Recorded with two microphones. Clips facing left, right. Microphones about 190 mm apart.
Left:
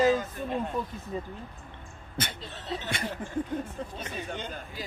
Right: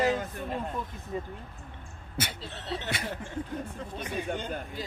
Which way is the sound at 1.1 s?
20° left (ahead or behind).